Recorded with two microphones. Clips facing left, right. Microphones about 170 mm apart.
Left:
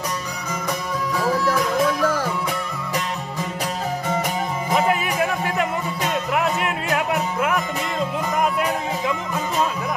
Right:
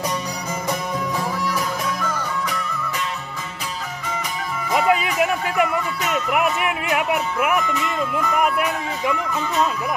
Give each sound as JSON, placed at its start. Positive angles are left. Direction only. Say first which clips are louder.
{"t": 4.7, "sound": "music", "louder": "right 2 dB", "side_deg": -15}